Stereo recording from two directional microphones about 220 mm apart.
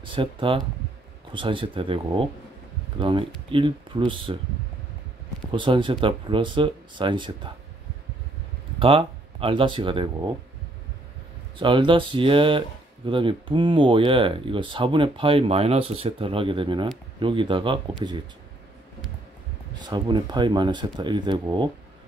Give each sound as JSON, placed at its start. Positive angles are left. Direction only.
{"t": 0.0, "sound": "speech", "side_deg": -25}
{"t": 5.5, "sound": "speech", "side_deg": -20}
{"t": 8.7, "sound": "speech", "side_deg": -25}
{"t": 11.5, "sound": "speech", "side_deg": -20}
{"t": 19.9, "sound": "speech", "side_deg": -20}